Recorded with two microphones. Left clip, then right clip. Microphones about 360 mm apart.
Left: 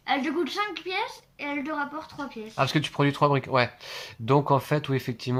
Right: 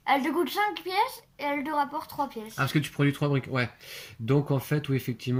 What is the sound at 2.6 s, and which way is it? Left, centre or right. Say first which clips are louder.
Speech: left 3 dB; centre.